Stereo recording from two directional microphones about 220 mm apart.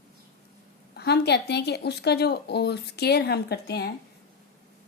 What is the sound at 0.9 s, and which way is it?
A woman's voice, 50° left (ahead or behind).